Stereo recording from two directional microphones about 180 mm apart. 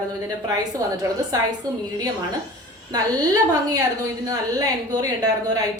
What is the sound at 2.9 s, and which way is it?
Speech, 20° right (ahead or behind).